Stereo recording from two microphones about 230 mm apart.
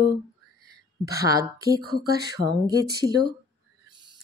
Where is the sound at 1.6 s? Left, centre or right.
Right.